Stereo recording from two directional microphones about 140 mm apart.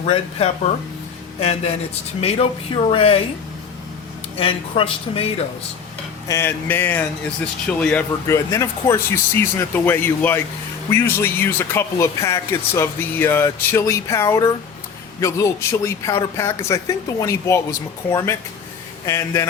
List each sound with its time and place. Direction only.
0.0 s speech: 50° left (ahead or behind)
2.9 s speech: 40° left (ahead or behind)
4.4 s speech: 40° left (ahead or behind)
6.2 s speech: 20° left (ahead or behind)
8.4 s speech: 20° left (ahead or behind)